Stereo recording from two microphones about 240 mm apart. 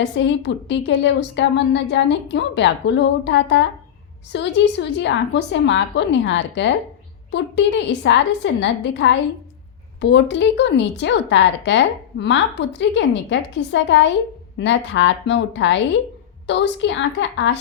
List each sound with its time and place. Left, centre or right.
0.0 s speech: left